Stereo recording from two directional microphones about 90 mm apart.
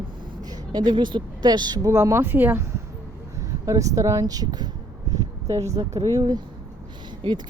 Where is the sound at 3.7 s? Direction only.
35° right (ahead or behind).